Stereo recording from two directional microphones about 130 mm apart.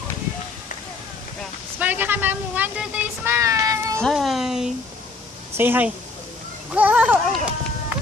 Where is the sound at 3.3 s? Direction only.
25° right (ahead or behind).